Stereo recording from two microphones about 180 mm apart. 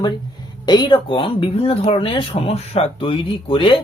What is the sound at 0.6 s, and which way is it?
Speech, 25° left (ahead or behind).